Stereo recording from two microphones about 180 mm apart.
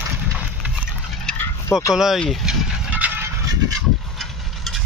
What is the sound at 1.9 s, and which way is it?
Speech, centre (ahead or behind).